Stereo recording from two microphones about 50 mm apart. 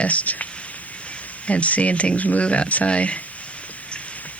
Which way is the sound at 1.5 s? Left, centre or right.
Left.